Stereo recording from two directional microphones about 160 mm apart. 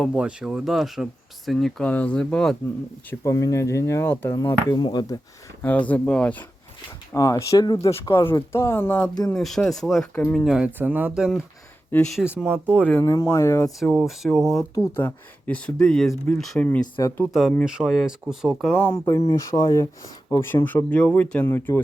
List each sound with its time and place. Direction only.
0.0 s speech: 5° right (ahead or behind)
3.1 s speech: 20° left (ahead or behind)
5.6 s speech: 10° left (ahead or behind)
7.1 s speech: 20° left (ahead or behind)
8.3 s speech: 15° left (ahead or behind)
9.3 s speech: centre (ahead or behind)
11.9 s speech: 10° left (ahead or behind)
12.5 s speech: 10° right (ahead or behind)
12.8 s speech: 10° left (ahead or behind)
13.1 s speech: 20° left (ahead or behind)
13.7 s speech: centre (ahead or behind)
17.0 s speech: 20° left (ahead or behind)
17.7 s speech: 5° right (ahead or behind)
18.9 s speech: 20° left (ahead or behind)